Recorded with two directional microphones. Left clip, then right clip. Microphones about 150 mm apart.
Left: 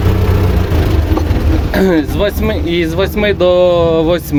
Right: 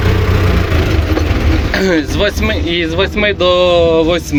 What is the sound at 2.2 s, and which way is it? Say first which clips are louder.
Speech: even; 15° left (ahead or behind).